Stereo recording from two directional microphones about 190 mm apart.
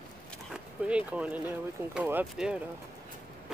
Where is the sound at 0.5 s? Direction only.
5° right (ahead or behind).